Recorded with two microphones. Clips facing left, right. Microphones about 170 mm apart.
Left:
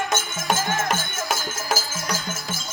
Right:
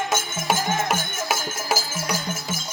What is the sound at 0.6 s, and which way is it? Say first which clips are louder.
Music: right 1 dB; 15° right (ahead or behind).